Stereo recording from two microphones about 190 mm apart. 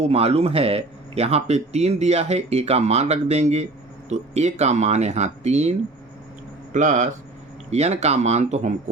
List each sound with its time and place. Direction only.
0.0 s speech: 30° right (ahead or behind)
6.7 s speech: 40° right (ahead or behind)